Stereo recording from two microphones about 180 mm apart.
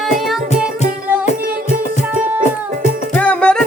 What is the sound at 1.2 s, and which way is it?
Music, 40° left (ahead or behind).